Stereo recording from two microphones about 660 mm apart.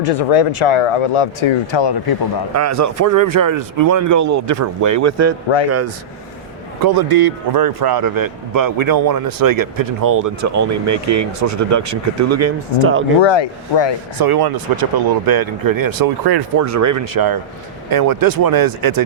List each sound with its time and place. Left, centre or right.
0.1 s speech: left
2.5 s a man's voice: right
6.8 s a man's voice: right; by 13.1 s centre
13.2 s speech: left
14.2 s speech: right